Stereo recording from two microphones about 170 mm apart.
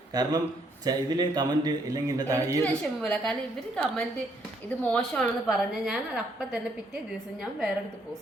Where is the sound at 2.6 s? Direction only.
10° left (ahead or behind).